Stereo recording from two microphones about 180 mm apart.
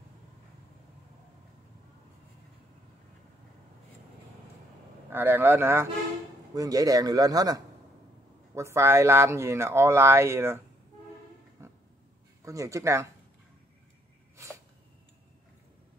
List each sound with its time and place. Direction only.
5.1 s a man's voice: 10° right (ahead or behind)
11.6 s music: 15° right (ahead or behind)
12.4 s speech: 15° right (ahead or behind)
14.3 s sneeze: 15° right (ahead or behind)